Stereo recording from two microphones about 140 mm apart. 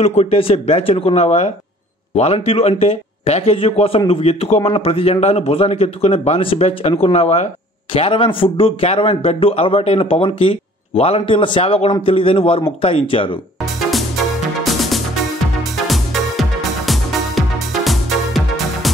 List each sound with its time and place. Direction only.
0.0 s a man's voice: 50° left (ahead or behind)
13.7 s music: centre (ahead or behind)